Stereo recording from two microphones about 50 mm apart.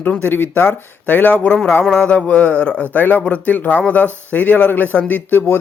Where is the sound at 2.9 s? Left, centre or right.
Left.